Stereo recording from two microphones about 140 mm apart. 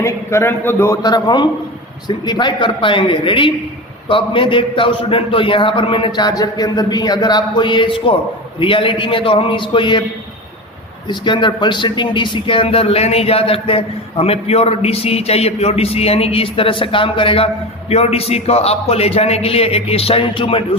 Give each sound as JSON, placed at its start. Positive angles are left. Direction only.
{"t": 0.0, "sound": "a man's voice", "side_deg": 20}
{"t": 1.0, "sound": "a man's voice", "side_deg": 30}
{"t": 11.1, "sound": "speech", "side_deg": 35}